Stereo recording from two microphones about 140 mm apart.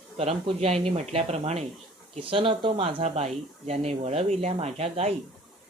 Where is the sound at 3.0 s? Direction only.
50° right (ahead or behind).